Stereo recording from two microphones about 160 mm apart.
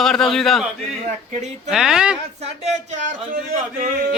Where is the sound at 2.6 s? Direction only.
45° right (ahead or behind).